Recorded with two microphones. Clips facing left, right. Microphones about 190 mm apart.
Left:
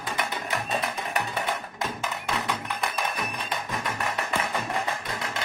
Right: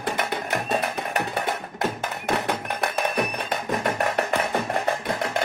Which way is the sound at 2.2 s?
65° right (ahead or behind).